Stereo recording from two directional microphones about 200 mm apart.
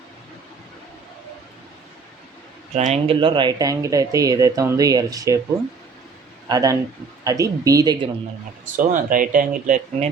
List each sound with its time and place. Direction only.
2.7 s speech: 35° right (ahead or behind); by 5.4 s 15° right (ahead or behind)
6.5 s speech: 15° right (ahead or behind)
8.7 s speech: 40° right (ahead or behind)